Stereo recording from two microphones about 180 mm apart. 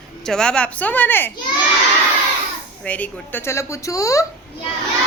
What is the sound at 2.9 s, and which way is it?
A woman's voice, 10° left (ahead or behind).